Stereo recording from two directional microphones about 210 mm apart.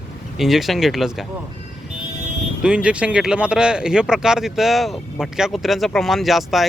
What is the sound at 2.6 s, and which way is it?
Speech, 5° right (ahead or behind).